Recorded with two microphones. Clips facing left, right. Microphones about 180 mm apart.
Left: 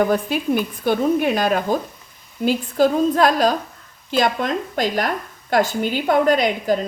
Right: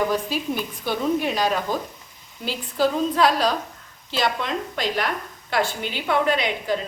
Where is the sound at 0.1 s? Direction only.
55° left (ahead or behind).